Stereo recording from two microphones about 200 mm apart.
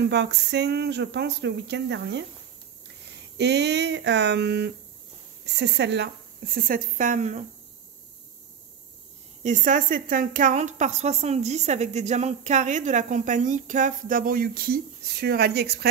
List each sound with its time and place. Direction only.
0.0 s a woman's voice: 60° right (ahead or behind); by 7.4 s 35° right (ahead or behind)
9.4 s a woman's voice: 40° right (ahead or behind)